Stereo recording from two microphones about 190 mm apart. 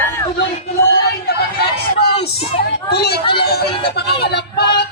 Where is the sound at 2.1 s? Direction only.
30° left (ahead or behind).